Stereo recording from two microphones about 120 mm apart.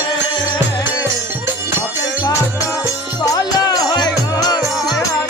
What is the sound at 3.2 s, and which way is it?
Music, 30° left (ahead or behind).